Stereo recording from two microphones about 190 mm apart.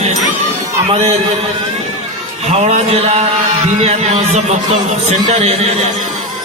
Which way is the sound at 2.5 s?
35° right (ahead or behind).